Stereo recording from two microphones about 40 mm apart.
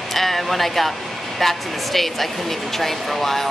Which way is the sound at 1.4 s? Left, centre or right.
Centre.